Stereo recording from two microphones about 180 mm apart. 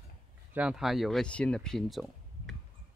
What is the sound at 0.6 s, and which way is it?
Speech, 5° right (ahead or behind).